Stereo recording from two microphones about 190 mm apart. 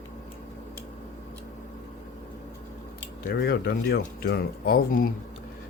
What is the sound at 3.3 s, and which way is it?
Speech, 55° left (ahead or behind).